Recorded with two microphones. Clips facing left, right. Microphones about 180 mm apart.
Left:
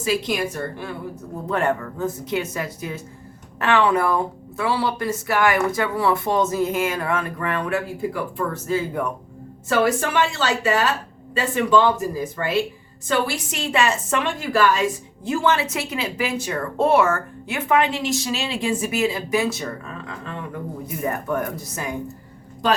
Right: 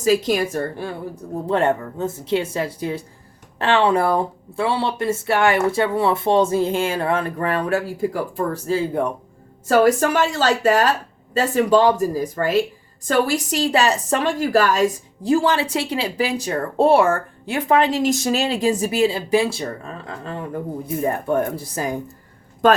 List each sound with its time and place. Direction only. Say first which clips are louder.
0.0 s a woman's voice: right 5 dB; 40° right (ahead or behind)
9.6 s a woman's voice: right 5 dB; 40° right (ahead or behind)